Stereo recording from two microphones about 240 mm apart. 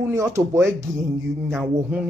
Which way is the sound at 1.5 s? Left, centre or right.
Centre.